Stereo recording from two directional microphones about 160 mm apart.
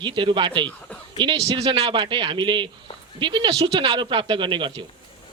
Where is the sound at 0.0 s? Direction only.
30° right (ahead or behind).